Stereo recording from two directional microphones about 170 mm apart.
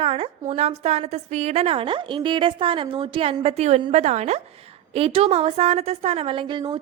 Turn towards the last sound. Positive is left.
turn(degrees=-30)  # may be behind; listen again after turning